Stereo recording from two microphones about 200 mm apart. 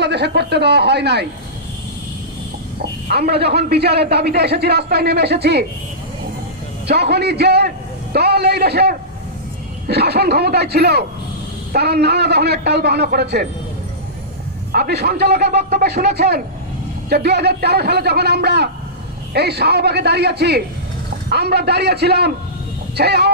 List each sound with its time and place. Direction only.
0.0 s a man's voice: 55° right (ahead or behind)
3.1 s a man's voice: 55° right (ahead or behind)
6.9 s a man's voice: 55° right (ahead or behind)
14.7 s a man's voice: 50° right (ahead or behind)